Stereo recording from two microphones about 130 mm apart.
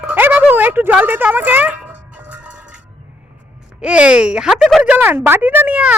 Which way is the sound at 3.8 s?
10° right (ahead or behind).